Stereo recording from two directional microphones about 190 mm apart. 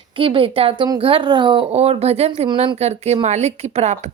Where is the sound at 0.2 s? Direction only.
30° right (ahead or behind).